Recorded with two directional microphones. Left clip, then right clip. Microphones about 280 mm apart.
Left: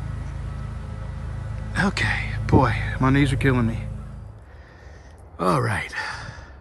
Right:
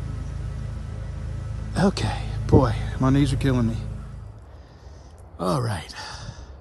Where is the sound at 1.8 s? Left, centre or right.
Centre.